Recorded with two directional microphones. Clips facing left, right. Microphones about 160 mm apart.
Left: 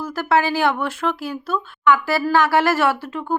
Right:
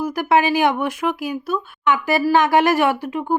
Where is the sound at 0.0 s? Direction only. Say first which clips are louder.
Right 2 dB; 15° right (ahead or behind).